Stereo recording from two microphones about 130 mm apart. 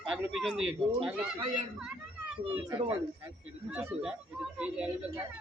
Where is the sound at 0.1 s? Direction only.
5° right (ahead or behind).